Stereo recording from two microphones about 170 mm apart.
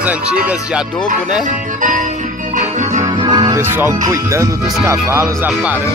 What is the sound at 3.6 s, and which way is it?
Speech, 15° right (ahead or behind).